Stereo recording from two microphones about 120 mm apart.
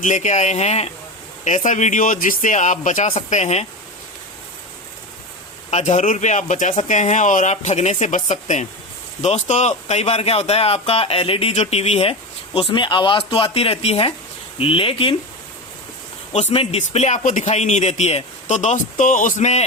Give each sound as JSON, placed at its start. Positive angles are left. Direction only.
{"t": 0.0, "sound": "speech", "side_deg": 90}
{"t": 1.5, "sound": "speech", "side_deg": 90}
{"t": 5.7, "sound": "speech", "side_deg": 65}
{"t": 9.2, "sound": "speech", "side_deg": 70}
{"t": 12.5, "sound": "speech", "side_deg": 45}
{"t": 16.5, "sound": "speech", "side_deg": 55}